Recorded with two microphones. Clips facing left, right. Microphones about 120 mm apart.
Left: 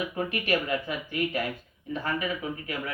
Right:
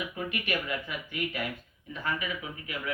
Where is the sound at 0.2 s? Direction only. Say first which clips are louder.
Left 6 dB; 35° left (ahead or behind).